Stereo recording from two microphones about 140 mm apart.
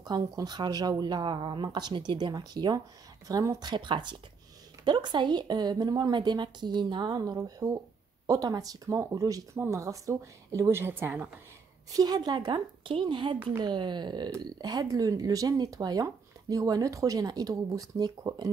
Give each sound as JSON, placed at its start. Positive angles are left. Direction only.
{"t": 0.0, "sound": "a woman's voice", "side_deg": -30}
{"t": 11.9, "sound": "a woman's voice", "side_deg": -30}